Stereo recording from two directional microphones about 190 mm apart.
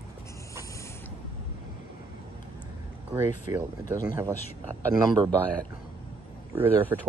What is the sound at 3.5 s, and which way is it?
Speech, 20° right (ahead or behind).